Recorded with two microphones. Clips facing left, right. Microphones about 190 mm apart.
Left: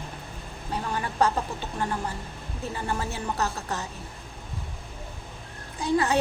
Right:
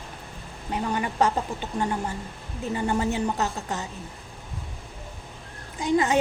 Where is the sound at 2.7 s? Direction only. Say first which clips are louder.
Right 7 dB; 20° right (ahead or behind).